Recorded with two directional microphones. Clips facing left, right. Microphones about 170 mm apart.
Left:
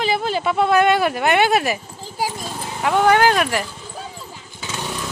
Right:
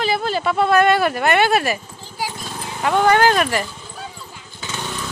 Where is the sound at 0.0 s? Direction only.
15° left (ahead or behind).